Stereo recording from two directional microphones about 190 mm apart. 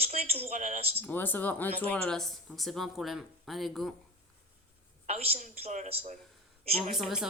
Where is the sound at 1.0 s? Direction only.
10° left (ahead or behind).